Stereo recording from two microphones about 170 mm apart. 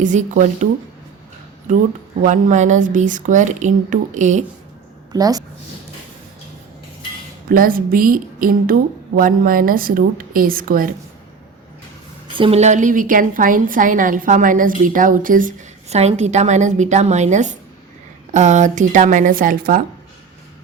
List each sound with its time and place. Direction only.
0.0 s a woman's voice: 45° right (ahead or behind)
1.7 s a woman's voice: 50° right (ahead or behind)
5.1 s a woman's voice: 20° right (ahead or behind)
7.5 s a woman's voice: 55° right (ahead or behind)
12.4 s a woman's voice: 40° right (ahead or behind); by 19.8 s 55° right (ahead or behind)